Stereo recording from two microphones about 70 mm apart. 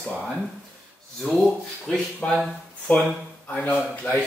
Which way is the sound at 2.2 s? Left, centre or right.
Centre.